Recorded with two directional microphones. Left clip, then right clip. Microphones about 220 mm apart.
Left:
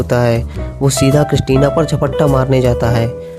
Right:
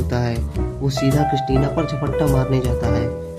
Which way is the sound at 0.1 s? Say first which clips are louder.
Left 13 dB; 50° left (ahead or behind).